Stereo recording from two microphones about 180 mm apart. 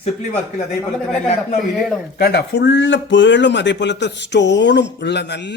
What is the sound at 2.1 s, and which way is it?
Speech, 65° left (ahead or behind).